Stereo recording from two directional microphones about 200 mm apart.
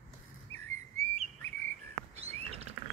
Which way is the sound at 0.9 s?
35° right (ahead or behind).